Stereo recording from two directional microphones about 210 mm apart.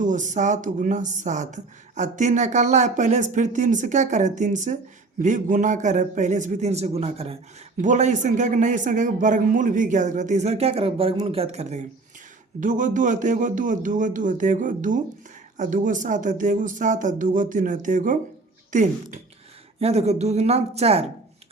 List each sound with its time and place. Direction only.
0.0 s speech: 35° right (ahead or behind)